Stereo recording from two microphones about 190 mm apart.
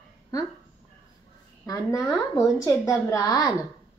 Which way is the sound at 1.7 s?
15° left (ahead or behind).